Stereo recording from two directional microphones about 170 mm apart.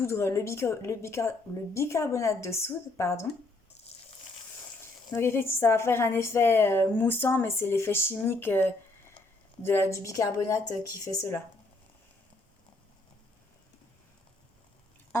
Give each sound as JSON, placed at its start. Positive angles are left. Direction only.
{"t": 0.0, "sound": "a woman's voice", "side_deg": 15}
{"t": 5.1, "sound": "a woman's voice", "side_deg": 15}